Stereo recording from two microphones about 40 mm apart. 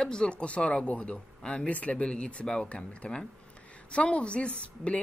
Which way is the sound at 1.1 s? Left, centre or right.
Centre.